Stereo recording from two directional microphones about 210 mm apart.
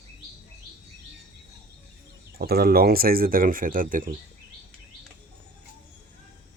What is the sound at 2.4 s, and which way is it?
Speech, 45° right (ahead or behind).